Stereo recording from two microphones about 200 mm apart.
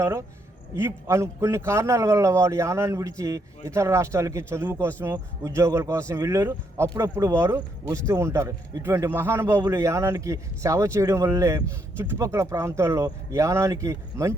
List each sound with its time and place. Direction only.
0.0 s a man's voice: 15° right (ahead or behind)